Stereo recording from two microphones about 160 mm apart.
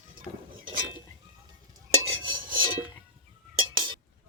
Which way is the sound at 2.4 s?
60° right (ahead or behind).